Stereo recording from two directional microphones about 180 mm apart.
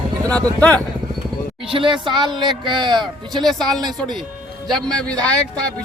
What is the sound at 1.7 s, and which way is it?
A man's voice, 30° right (ahead or behind).